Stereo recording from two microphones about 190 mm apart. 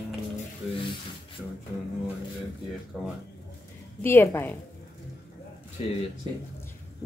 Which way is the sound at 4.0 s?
10° left (ahead or behind).